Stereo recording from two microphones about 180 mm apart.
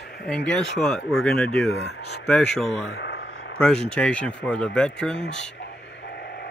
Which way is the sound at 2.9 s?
70° left (ahead or behind).